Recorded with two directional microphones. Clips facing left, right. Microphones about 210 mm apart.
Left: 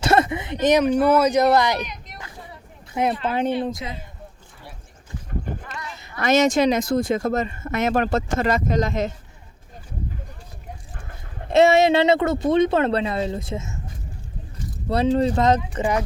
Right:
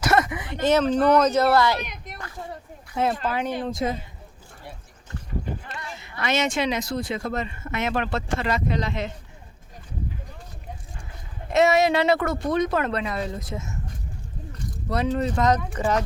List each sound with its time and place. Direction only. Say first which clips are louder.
0.0 s speech: left 3 dB; 30° left (ahead or behind)
2.9 s speech: left 2 dB; 15° left (ahead or behind)
3.2 s a woman's voice: left 4 dB; 25° left (ahead or behind)
3.8 s speech: right 7 dB; 45° right (ahead or behind)
5.5 s boat: left 1 dB; 50° left (ahead or behind)
6.0 s speech: left 7 dB; 40° left (ahead or behind)
11.5 s a woman's voice: left 4 dB; 30° left (ahead or behind)
14.8 s a woman's voice: left 5 dB; 30° left (ahead or behind)